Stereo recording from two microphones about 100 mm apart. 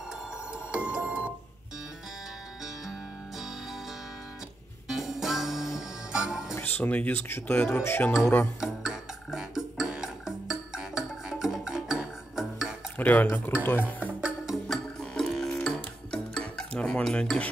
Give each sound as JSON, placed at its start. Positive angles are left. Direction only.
{"t": 0.5, "sound": "music", "side_deg": -10}
{"t": 2.6, "sound": "music", "side_deg": -5}
{"t": 4.8, "sound": "music", "side_deg": 0}
{"t": 6.5, "sound": "speech", "side_deg": 20}
{"t": 8.5, "sound": "music", "side_deg": -5}
{"t": 12.9, "sound": "speech", "side_deg": 15}
{"t": 13.7, "sound": "music", "side_deg": -15}